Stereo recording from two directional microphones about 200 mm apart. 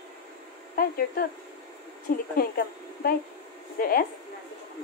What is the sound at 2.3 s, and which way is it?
Speech, 50° left (ahead or behind).